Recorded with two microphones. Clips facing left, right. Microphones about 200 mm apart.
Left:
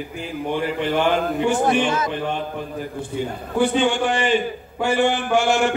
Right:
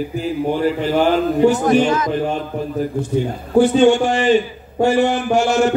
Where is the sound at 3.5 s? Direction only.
45° right (ahead or behind).